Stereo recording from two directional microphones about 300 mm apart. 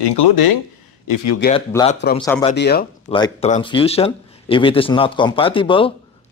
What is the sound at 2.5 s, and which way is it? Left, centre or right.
Speech, left.